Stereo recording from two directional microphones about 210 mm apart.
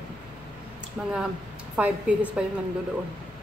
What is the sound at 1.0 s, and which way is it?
Speech, 5° right (ahead or behind).